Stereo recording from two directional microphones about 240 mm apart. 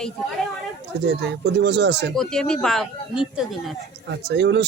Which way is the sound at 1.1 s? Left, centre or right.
Right.